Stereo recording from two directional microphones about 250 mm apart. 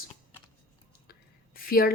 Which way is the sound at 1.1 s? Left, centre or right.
Left.